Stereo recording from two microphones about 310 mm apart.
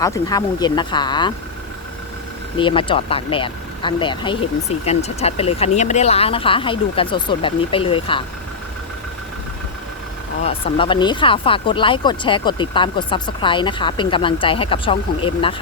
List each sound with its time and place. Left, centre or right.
0.0 s speech: centre
2.6 s speech: centre
10.4 s speech: centre